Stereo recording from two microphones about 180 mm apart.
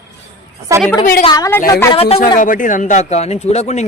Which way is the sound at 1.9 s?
35° left (ahead or behind).